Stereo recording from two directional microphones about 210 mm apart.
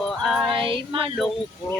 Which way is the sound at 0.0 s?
Centre (ahead or behind).